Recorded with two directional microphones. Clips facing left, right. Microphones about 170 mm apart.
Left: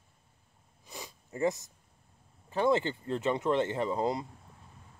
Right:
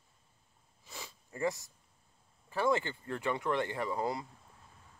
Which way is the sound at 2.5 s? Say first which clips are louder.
Left 4 dB; 20° left (ahead or behind).